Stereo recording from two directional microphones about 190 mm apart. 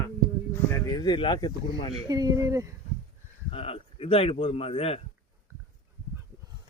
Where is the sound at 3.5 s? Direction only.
30° left (ahead or behind).